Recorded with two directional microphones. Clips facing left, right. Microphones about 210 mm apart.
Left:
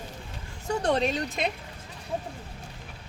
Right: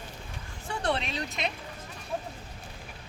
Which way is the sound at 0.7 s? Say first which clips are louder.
Left 6 dB; 45° left (ahead or behind).